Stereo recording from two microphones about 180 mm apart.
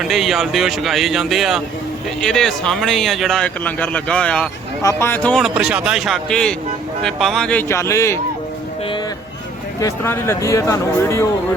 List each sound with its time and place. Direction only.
0.0 s speech: centre (ahead or behind)
5.5 s speech: 5° right (ahead or behind); by 8.2 s 15° left (ahead or behind)
9.8 s speech: 15° left (ahead or behind)